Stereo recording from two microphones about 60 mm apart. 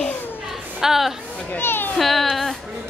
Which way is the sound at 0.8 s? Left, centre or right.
Centre.